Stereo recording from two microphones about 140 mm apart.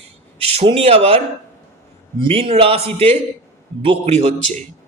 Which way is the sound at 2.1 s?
40° right (ahead or behind).